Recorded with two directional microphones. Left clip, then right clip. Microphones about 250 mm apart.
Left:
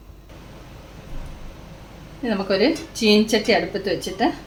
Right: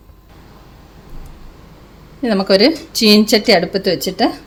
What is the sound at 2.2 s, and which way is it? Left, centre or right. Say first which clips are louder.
A woman's voice: right 8 dB; right.